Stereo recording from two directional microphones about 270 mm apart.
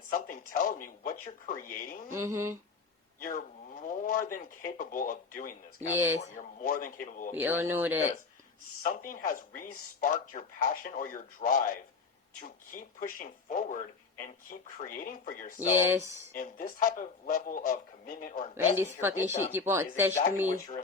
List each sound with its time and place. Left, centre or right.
0.1 s speech: left
2.0 s speech: centre
3.2 s speech: left
5.9 s speech: centre
6.3 s speech: left
7.3 s speech: centre
8.8 s speech: left
15.5 s speech: centre
16.3 s speech: left
18.5 s speech: centre